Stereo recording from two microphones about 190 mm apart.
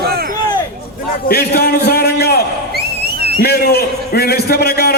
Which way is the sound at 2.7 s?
55° right (ahead or behind).